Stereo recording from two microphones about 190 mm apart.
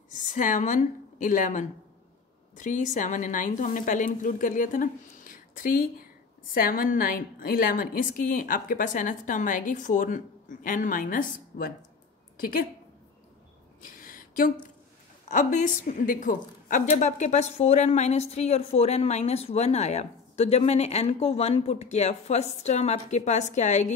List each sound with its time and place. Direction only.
0.3 s a woman's voice: 45° left (ahead or behind)
13.8 s a sound: 45° left (ahead or behind)
15.2 s a woman's voice: 40° left (ahead or behind)